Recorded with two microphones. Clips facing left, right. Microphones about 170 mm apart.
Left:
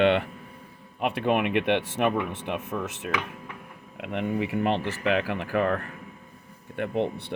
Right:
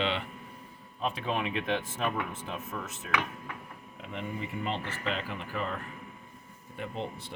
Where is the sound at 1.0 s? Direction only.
65° left (ahead or behind).